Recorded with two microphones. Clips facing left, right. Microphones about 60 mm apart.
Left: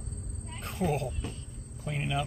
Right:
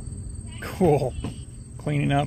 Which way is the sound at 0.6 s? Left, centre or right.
Right.